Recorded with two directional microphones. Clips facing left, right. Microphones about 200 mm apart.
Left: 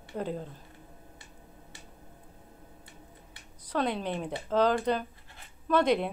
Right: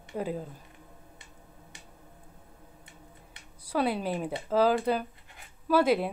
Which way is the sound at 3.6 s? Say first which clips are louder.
Right 2 dB; 10° right (ahead or behind).